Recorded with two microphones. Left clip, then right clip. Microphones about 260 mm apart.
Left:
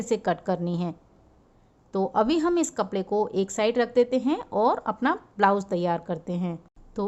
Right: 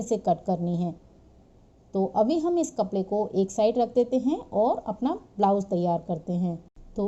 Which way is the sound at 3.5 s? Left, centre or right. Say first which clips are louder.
Left 1 dB; left.